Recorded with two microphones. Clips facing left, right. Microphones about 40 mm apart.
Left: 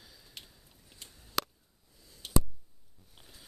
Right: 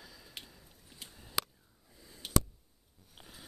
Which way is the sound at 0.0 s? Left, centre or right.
Right.